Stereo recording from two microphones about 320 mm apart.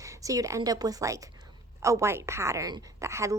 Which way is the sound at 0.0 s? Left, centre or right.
Centre.